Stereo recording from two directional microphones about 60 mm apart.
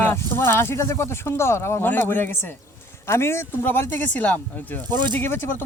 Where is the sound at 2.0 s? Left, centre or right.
Left.